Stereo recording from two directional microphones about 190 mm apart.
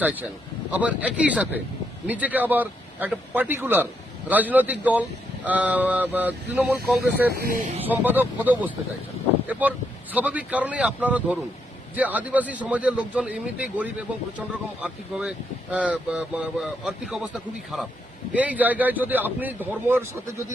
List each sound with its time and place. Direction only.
0.0 s a man's voice: 10° right (ahead or behind)
7.3 s speech: 55° right (ahead or behind)
7.9 s a man's voice: 10° right (ahead or behind)